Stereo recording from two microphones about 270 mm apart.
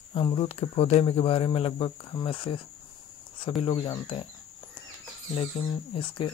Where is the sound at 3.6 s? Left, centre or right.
Centre.